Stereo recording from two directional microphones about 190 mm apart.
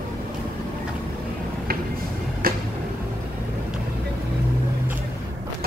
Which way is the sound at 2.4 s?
50° right (ahead or behind).